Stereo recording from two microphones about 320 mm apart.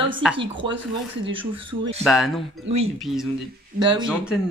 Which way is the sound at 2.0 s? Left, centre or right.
Centre.